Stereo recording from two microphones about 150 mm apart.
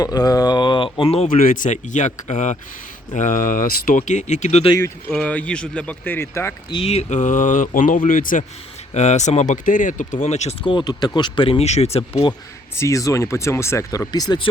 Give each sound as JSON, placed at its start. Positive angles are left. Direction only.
{"t": 0.0, "sound": "speech", "side_deg": 25}
{"t": 1.3, "sound": "speech", "side_deg": 60}
{"t": 5.1, "sound": "speech", "side_deg": 10}
{"t": 6.7, "sound": "speech", "side_deg": 35}
{"t": 8.9, "sound": "speech", "side_deg": 50}
{"t": 10.6, "sound": "speech", "side_deg": 30}
{"t": 12.7, "sound": "speech", "side_deg": 20}